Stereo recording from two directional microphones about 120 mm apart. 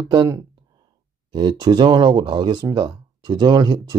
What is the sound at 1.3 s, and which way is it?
Speech, 35° right (ahead or behind).